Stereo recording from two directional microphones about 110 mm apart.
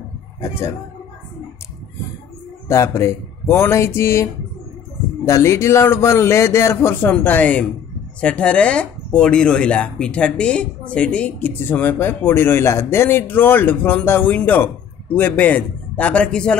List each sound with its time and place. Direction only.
0.4 s a man's voice: 25° left (ahead or behind)
2.7 s a man's voice: 25° left (ahead or behind); by 16.5 s 10° left (ahead or behind)